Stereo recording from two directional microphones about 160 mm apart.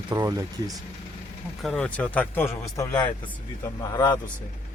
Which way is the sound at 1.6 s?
5° left (ahead or behind).